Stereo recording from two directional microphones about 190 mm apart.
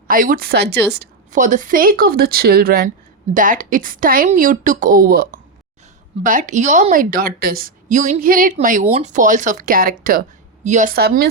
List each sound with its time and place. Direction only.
0.1 s speech: 45° right (ahead or behind)
1.3 s speech: 40° right (ahead or behind)